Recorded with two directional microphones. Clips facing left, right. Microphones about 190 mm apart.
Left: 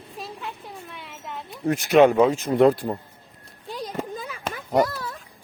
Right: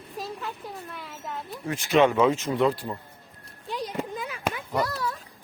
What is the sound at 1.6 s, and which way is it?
A man's voice, 45° left (ahead or behind).